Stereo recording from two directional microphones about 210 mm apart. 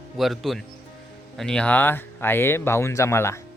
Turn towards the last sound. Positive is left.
turn(degrees=10)  # may be behind; listen again after turning